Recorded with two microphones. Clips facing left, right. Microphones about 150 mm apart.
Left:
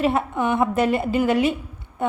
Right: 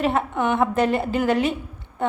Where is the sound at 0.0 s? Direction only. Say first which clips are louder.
Left 1 dB; 10° left (ahead or behind).